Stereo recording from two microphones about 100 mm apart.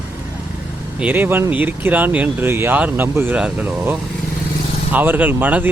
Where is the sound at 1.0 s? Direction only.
20° right (ahead or behind).